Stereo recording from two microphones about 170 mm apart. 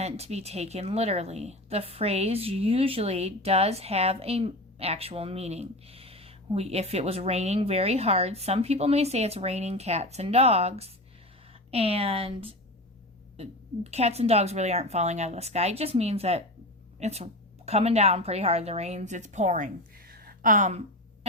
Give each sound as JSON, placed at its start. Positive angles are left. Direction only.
{"t": 0.0, "sound": "a woman's voice", "side_deg": -40}